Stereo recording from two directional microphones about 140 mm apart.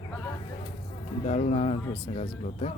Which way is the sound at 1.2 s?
55° left (ahead or behind).